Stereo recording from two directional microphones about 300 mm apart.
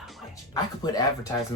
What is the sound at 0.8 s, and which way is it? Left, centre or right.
Speech, centre.